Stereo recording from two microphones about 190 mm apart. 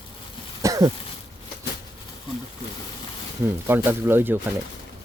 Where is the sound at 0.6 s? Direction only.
20° right (ahead or behind).